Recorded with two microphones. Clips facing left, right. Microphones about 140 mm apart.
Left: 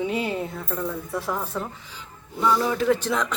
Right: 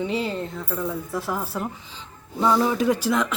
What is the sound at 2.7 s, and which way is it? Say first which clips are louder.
Music: even; 15° right (ahead or behind).